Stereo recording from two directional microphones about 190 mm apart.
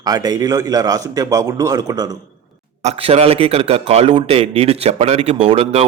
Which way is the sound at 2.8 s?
35° right (ahead or behind).